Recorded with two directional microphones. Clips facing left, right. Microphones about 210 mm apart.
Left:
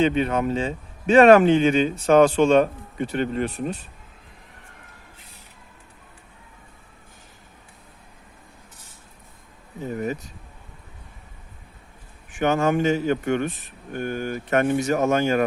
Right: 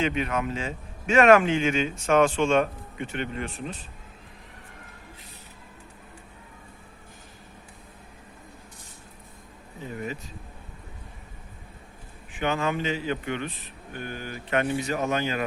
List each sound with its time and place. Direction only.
0.0 s speech: 30° left (ahead or behind)
9.8 s speech: 40° left (ahead or behind)
12.4 s speech: 45° left (ahead or behind)